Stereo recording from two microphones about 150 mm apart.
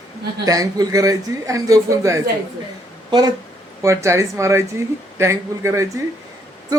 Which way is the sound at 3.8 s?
20° right (ahead or behind).